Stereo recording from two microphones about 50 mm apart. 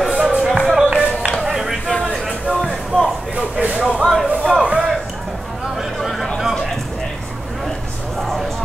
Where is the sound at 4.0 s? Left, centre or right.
Centre.